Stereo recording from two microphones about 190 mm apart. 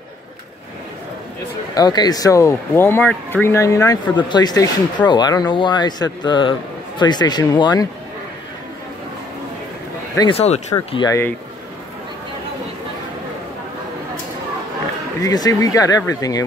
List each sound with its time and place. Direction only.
1.8 s speech: 20° left (ahead or behind)
10.1 s speech: 25° left (ahead or behind)
15.2 s speech: 20° left (ahead or behind)